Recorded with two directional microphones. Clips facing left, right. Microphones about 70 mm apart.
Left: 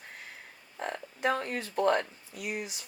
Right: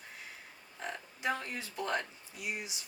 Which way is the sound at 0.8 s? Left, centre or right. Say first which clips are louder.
Left 7 dB; left.